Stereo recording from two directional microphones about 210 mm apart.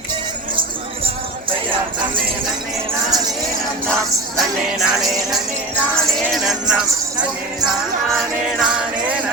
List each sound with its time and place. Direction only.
4.4 s music: centre (ahead or behind)